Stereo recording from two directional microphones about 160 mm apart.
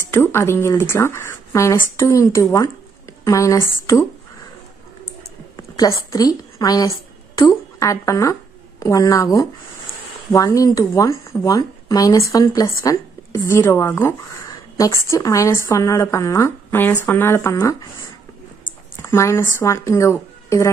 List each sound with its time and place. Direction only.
0.1 s speech: 15° left (ahead or behind)
5.8 s a woman's voice: 20° left (ahead or behind)
18.9 s a woman's voice: 15° left (ahead or behind)